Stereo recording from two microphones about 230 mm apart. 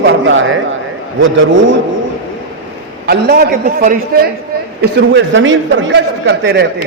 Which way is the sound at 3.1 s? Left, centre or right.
Right.